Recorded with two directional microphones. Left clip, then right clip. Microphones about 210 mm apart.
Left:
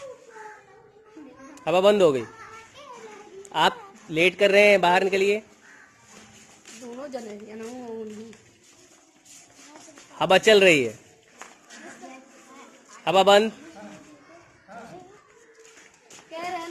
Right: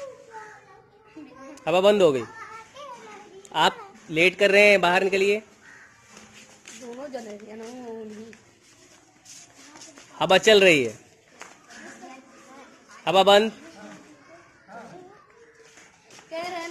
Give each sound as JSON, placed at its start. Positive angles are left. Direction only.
{"t": 1.5, "sound": "a man's voice", "side_deg": 0}
{"t": 3.4, "sound": "speech", "side_deg": 0}
{"t": 7.0, "sound": "a sound", "side_deg": 55}
{"t": 10.1, "sound": "speech", "side_deg": 0}
{"t": 13.0, "sound": "speech", "side_deg": 0}